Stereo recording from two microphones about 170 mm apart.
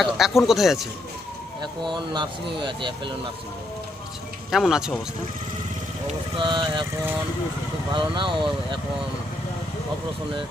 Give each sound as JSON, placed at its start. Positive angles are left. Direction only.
{"t": 0.0, "sound": "speech", "side_deg": 0}
{"t": 1.6, "sound": "speech", "side_deg": -25}
{"t": 4.5, "sound": "speech", "side_deg": 0}
{"t": 6.1, "sound": "speech", "side_deg": -30}
{"t": 7.9, "sound": "speech", "side_deg": -30}